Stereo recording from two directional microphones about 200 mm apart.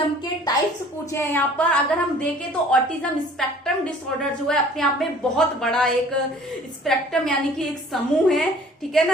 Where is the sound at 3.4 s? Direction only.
Centre (ahead or behind).